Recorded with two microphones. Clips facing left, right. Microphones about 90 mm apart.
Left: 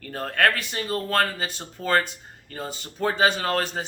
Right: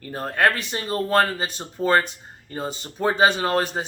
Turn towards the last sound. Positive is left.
turn(degrees=-20)  # may be behind; listen again after turning